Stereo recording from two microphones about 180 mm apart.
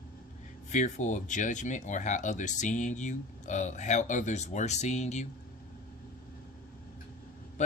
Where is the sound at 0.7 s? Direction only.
40° left (ahead or behind).